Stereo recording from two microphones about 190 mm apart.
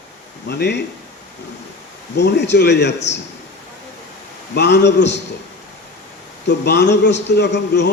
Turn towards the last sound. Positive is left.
turn(degrees=65)  # may be behind; listen again after turning